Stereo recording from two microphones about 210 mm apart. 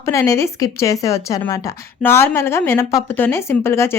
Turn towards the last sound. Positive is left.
turn(degrees=10)  # may be behind; listen again after turning